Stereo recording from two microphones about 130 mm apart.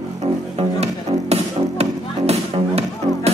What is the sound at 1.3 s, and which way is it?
Music, 50° right (ahead or behind).